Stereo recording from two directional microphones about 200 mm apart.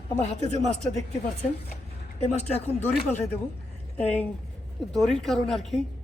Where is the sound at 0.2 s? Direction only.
35° left (ahead or behind).